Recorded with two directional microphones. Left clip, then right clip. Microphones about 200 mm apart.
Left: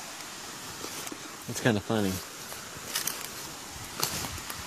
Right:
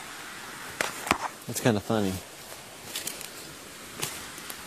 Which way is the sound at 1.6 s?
20° right (ahead or behind).